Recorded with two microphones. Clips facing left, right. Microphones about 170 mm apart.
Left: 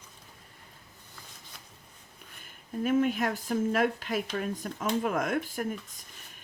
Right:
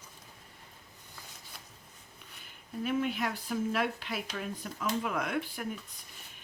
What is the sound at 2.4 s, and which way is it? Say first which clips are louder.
Speech: left 5 dB; 45° left (ahead or behind).